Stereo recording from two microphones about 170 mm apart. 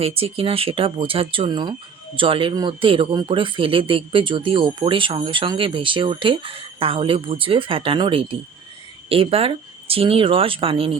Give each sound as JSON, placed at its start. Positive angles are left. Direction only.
{"t": 0.0, "sound": "speech", "side_deg": -35}